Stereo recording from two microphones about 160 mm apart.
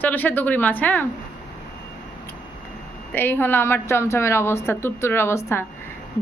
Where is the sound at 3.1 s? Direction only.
15° left (ahead or behind).